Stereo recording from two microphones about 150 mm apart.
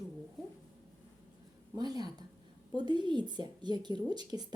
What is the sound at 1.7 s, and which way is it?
A woman's voice, 25° right (ahead or behind).